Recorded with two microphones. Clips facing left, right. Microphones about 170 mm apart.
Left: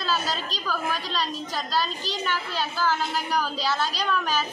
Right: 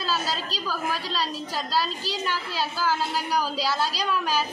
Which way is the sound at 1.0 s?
35° right (ahead or behind).